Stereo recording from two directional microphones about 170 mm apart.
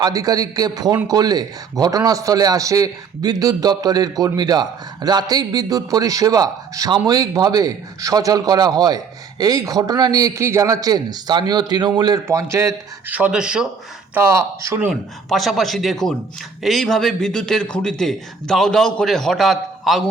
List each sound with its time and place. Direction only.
0.0 s a man's voice: 20° right (ahead or behind); by 13.7 s 5° right (ahead or behind)
14.1 s a man's voice: 15° right (ahead or behind)